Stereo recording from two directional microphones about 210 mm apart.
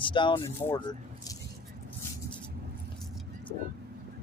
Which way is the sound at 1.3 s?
15° left (ahead or behind).